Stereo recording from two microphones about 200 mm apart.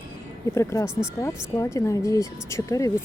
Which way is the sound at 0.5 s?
15° left (ahead or behind).